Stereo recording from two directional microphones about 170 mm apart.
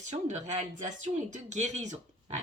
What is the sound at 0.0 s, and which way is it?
A woman's voice, 45° right (ahead or behind).